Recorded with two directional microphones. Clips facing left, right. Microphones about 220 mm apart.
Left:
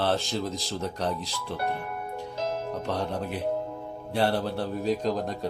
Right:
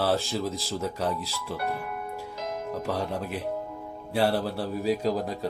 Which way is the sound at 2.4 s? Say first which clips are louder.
Left 4 dB; 30° left (ahead or behind).